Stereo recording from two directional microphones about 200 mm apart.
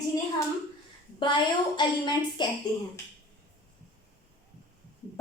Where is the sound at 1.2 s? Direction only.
25° left (ahead or behind).